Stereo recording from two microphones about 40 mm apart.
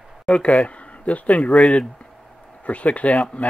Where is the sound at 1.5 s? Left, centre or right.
Centre.